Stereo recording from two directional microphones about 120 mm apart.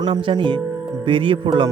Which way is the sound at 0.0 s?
45° right (ahead or behind).